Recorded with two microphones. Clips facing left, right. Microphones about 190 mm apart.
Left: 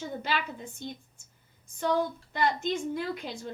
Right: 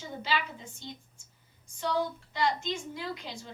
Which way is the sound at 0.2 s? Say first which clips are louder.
Right 4 dB; 55° left (ahead or behind).